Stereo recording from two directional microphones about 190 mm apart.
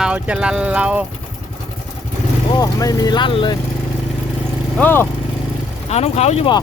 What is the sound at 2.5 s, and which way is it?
Speech, 20° left (ahead or behind).